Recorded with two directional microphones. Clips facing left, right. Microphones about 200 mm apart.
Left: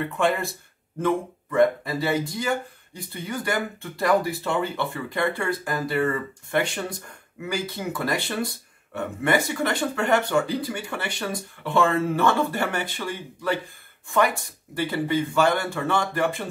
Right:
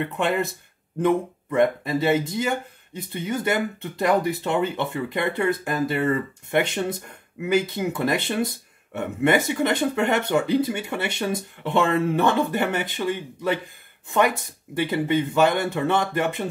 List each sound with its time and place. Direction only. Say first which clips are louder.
0.0 s speech: even; 20° right (ahead or behind)